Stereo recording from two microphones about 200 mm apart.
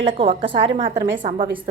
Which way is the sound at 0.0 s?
25° right (ahead or behind).